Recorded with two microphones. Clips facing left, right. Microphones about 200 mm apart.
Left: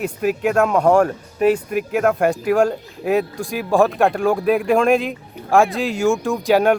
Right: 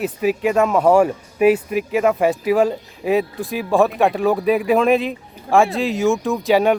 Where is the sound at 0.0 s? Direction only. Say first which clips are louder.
Right 1 dB; centre (ahead or behind).